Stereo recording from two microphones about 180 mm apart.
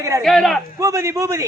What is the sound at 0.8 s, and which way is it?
Speech, 15° right (ahead or behind).